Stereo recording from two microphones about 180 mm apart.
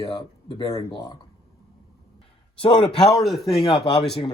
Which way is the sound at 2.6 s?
25° left (ahead or behind).